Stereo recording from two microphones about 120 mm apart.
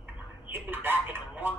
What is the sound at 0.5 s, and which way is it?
Telephone, 15° right (ahead or behind).